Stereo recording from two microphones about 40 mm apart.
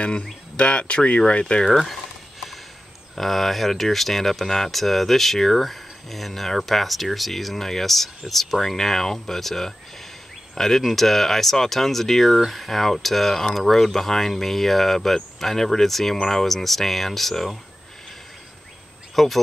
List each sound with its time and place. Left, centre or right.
0.0 s speech: left
1.7 s speech: centre
3.2 s speech: centre
19.1 s speech: centre